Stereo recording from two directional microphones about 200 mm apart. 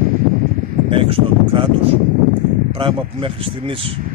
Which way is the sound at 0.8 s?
25° right (ahead or behind).